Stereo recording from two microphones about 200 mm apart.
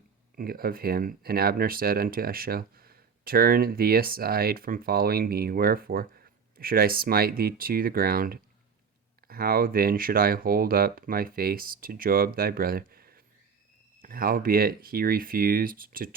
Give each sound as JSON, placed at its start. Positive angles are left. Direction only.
{"t": 0.3, "sound": "speech", "side_deg": -50}